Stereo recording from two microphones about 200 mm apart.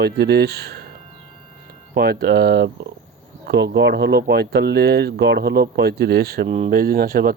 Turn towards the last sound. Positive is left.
turn(degrees=-50)  # may be behind; listen again after turning